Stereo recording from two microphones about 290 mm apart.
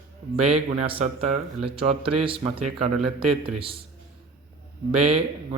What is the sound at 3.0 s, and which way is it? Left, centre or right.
Speech, centre.